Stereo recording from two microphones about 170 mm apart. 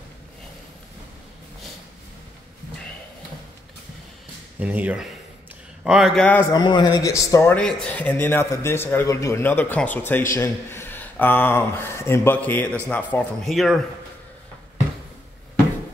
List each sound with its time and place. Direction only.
4.6 s a man's voice: 10° right (ahead or behind)
6.5 s a man's voice: 25° left (ahead or behind); by 13.8 s centre (ahead or behind)